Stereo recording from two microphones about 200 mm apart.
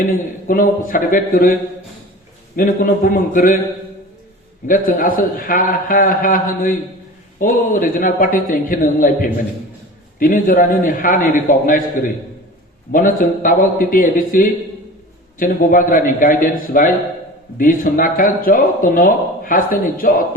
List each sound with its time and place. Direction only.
0.0 s a man's voice: 45° left (ahead or behind)
2.6 s a man's voice: 40° left (ahead or behind)
4.6 s a man's voice: 45° left (ahead or behind)